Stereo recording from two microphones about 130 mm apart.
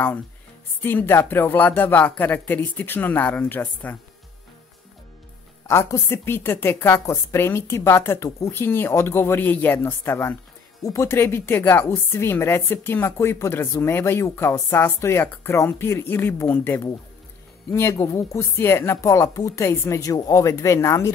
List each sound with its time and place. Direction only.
0.8 s a woman's voice: 15° left (ahead or behind)
5.7 s a woman's voice: 20° left (ahead or behind)